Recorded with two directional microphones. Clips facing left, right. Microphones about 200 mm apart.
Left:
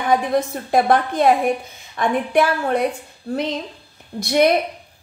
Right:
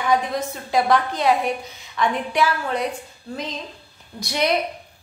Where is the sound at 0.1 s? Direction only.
55° left (ahead or behind).